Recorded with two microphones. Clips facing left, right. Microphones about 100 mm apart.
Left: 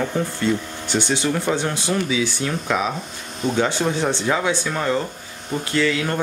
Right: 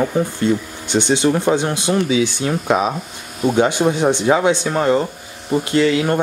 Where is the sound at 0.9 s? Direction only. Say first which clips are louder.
Right 6 dB; 20° right (ahead or behind).